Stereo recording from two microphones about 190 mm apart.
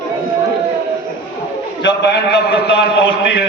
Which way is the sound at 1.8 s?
65° left (ahead or behind).